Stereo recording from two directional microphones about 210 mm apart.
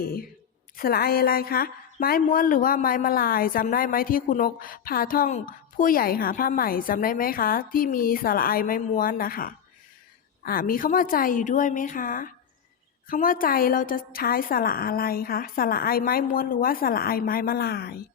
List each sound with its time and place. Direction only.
0.0 s a woman's voice: 45° left (ahead or behind)